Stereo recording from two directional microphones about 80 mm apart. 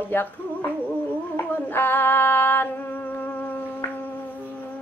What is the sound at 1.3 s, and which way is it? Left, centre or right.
Female singing, left.